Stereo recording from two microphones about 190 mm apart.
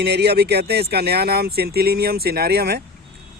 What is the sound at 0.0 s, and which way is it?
Speech, 60° right (ahead or behind).